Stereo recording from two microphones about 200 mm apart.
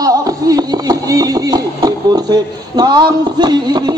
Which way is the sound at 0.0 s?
20° right (ahead or behind).